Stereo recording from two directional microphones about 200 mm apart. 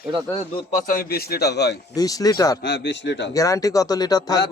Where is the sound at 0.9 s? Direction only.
45° left (ahead or behind).